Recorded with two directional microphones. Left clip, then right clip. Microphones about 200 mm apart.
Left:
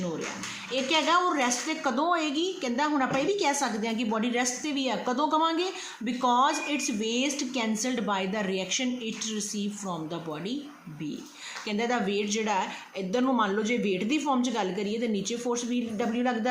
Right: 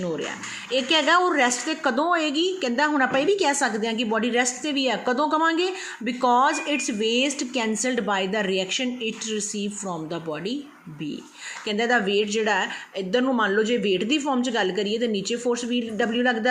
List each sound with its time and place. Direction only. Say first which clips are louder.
0.7 s a woman's voice: right 5 dB; 25° right (ahead or behind)
11.7 s a woman's voice: right 7 dB; 25° right (ahead or behind)